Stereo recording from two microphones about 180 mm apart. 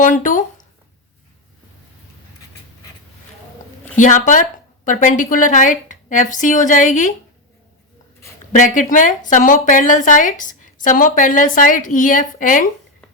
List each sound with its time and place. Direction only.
0.0 s speech: 45° left (ahead or behind)
3.9 s speech: 45° left (ahead or behind)
8.5 s speech: 45° left (ahead or behind)